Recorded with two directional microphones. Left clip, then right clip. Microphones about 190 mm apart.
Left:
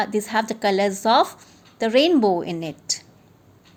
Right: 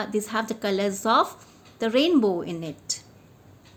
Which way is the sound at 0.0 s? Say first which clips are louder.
Left 5 dB; 25° left (ahead or behind).